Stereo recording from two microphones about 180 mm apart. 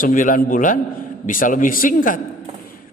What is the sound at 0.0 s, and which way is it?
A man's voice, 50° left (ahead or behind).